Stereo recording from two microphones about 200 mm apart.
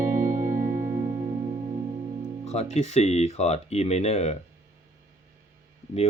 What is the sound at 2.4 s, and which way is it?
Speech, 35° left (ahead or behind).